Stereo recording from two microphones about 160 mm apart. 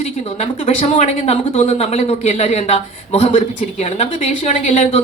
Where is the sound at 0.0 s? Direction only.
40° left (ahead or behind).